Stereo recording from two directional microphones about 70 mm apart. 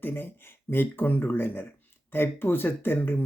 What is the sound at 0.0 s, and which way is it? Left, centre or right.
Speech, left.